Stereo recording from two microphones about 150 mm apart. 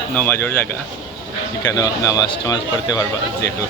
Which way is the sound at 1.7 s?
25° left (ahead or behind).